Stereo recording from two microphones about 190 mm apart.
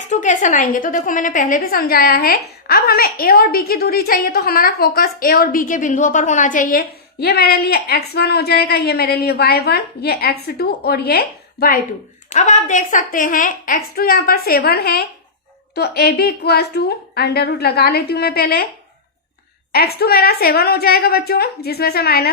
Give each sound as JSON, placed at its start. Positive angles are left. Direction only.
{"t": 0.1, "sound": "a woman's voice", "side_deg": 40}
{"t": 12.3, "sound": "a woman's voice", "side_deg": 40}
{"t": 19.7, "sound": "a woman's voice", "side_deg": 55}